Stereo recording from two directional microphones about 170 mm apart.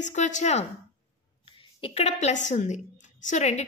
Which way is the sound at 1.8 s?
40° left (ahead or behind).